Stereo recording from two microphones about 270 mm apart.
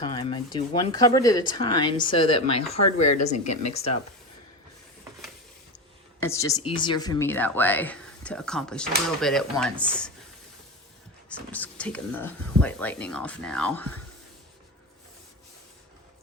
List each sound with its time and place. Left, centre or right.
0.0 s speech: centre
2.8 s speech: left
3.7 s speech: left
6.2 s speech: centre
11.3 s speech: centre